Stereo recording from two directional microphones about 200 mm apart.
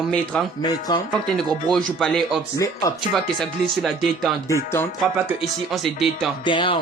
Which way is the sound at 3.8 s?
Centre (ahead or behind).